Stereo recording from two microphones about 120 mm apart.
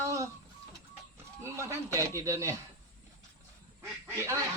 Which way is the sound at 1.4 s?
25° right (ahead or behind).